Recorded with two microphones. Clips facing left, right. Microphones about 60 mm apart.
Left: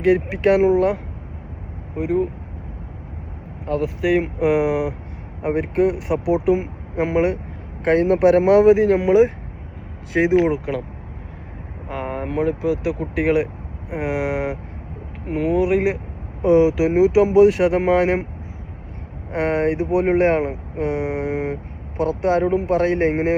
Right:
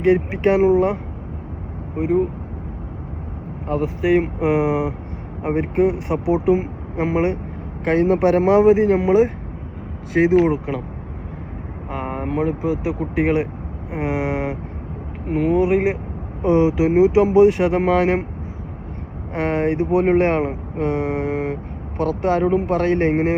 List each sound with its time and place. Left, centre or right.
0.1 s speech: centre
2.0 s speech: right
4.0 s speech: centre
11.9 s vehicle: centre
12.2 s speech: centre
12.5 s speech: right
13.0 s speech: centre
19.3 s speech: centre
20.4 s speech: right
20.8 s speech: centre